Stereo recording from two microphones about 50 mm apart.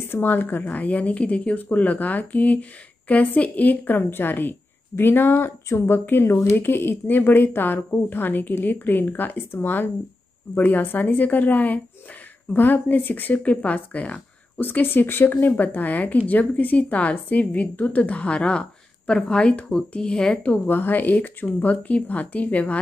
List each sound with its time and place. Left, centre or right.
0.1 s a woman's voice: left
5.7 s a woman's voice: left
14.6 s a woman's voice: left; by 20.3 s centre
20.6 s a woman's voice: left